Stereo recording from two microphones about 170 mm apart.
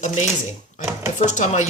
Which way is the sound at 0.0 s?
45° left (ahead or behind).